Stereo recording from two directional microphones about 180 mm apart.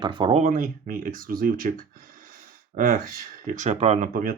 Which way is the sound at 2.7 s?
50° right (ahead or behind).